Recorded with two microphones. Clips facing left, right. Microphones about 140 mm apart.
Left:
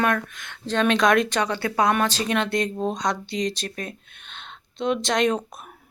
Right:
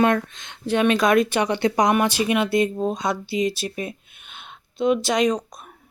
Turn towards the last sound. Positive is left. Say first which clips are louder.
# right 1 dB
turn(degrees=5)  # may be behind; listen again after turning